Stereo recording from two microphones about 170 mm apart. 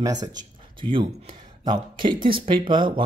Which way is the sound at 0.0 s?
25° right (ahead or behind).